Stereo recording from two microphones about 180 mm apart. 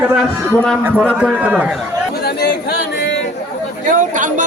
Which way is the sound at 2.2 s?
60° left (ahead or behind).